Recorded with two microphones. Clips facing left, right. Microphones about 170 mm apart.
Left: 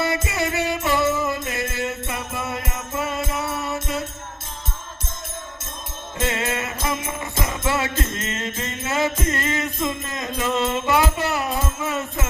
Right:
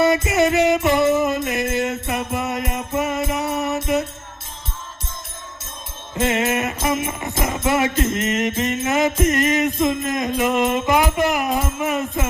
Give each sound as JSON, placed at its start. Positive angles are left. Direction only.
{"t": 0.0, "sound": "music", "side_deg": -20}
{"t": 6.1, "sound": "jingle bell", "side_deg": -20}